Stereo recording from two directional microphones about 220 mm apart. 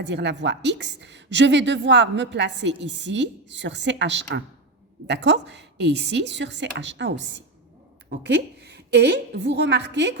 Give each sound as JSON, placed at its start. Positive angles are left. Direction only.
{"t": 0.0, "sound": "a woman's voice", "side_deg": -50}